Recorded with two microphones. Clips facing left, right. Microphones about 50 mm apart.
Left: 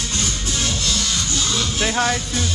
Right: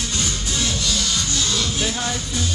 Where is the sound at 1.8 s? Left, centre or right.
Left.